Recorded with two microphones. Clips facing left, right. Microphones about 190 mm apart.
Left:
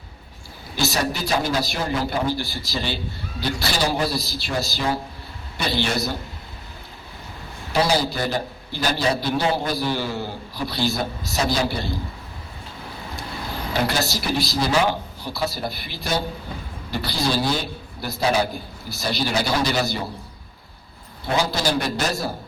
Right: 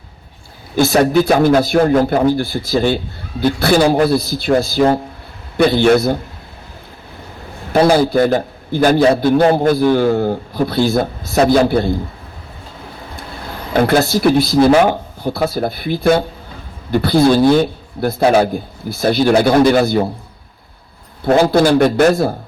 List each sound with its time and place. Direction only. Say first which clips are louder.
0.8 s a man's voice: right 12 dB; 55° right (ahead or behind)
7.7 s a man's voice: right 10 dB; 55° right (ahead or behind)
13.7 s a man's voice: right 11 dB; 55° right (ahead or behind)
21.2 s a man's voice: right 12 dB; 55° right (ahead or behind)